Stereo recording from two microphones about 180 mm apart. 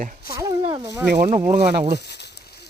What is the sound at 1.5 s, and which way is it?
Speech, 45° right (ahead or behind).